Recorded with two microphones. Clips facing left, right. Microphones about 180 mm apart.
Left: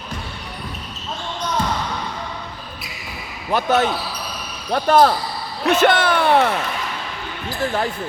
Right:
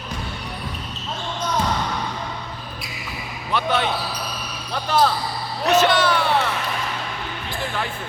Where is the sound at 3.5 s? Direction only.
45° left (ahead or behind).